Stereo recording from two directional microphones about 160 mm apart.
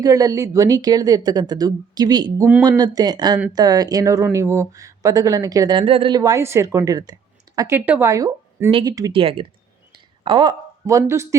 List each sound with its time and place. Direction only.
0.0 s a woman's voice: 20° right (ahead or behind)
9.2 s speech: 35° right (ahead or behind); by 11.3 s 15° right (ahead or behind)